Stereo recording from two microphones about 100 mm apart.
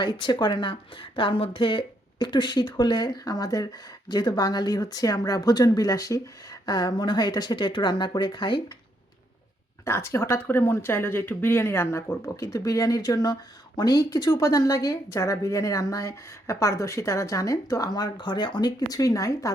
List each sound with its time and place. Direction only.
0.0 s speech: 45° left (ahead or behind)
9.8 s speech: 25° left (ahead or behind)